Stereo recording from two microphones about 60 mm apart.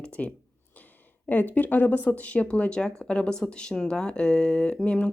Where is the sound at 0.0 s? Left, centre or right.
Centre.